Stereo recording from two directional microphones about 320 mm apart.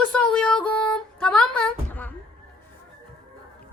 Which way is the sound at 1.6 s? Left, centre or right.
Centre.